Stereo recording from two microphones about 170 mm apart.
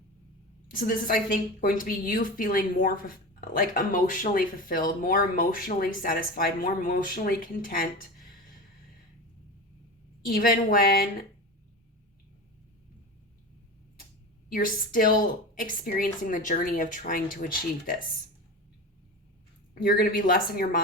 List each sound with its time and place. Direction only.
0.7 s speech: 55° left (ahead or behind)
10.2 s speech: 55° left (ahead or behind)
14.5 s a woman's voice: 55° left (ahead or behind)
19.7 s speech: 60° left (ahead or behind)